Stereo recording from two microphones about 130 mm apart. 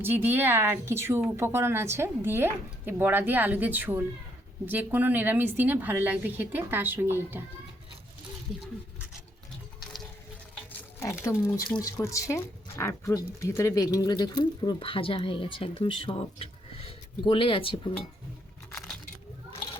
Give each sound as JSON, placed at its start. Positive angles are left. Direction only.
{"t": 0.0, "sound": "speech", "side_deg": -15}
{"t": 11.0, "sound": "speech", "side_deg": 20}
{"t": 18.7, "sound": "a sound", "side_deg": 5}